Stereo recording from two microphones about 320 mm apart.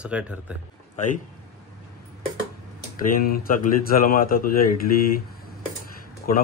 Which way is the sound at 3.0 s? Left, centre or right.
Left.